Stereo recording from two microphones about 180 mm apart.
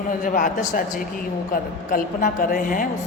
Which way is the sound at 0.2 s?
45° left (ahead or behind).